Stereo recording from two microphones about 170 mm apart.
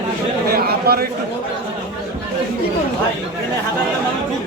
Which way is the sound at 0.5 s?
65° right (ahead or behind).